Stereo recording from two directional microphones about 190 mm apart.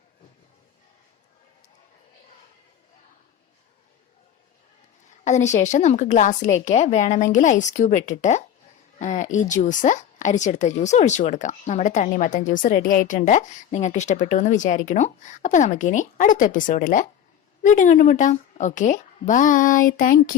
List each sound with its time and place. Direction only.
5.2 s speech: 40° left (ahead or behind)